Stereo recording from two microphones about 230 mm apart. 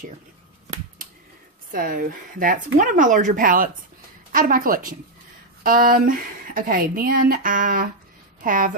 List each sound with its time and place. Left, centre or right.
1.7 s a woman's voice: right